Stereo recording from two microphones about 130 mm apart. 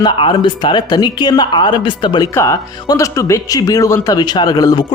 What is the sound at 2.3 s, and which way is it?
Speech, 25° left (ahead or behind).